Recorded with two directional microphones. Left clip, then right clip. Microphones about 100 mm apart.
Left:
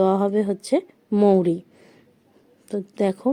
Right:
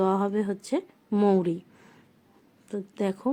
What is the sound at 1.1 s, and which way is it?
Speech, 25° left (ahead or behind).